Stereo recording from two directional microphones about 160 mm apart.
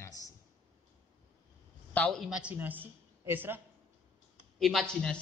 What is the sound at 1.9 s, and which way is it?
A woman's voice, 5° left (ahead or behind).